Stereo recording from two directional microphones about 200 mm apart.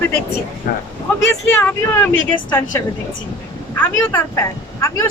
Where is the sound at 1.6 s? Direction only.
10° left (ahead or behind).